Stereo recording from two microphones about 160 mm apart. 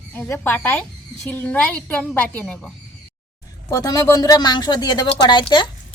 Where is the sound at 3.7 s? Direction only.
25° left (ahead or behind).